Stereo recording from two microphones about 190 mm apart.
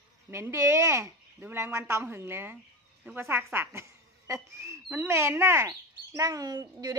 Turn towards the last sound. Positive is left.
turn(degrees=-20)  # may be behind; listen again after turning